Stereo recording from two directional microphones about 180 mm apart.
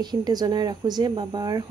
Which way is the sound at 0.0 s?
25° right (ahead or behind).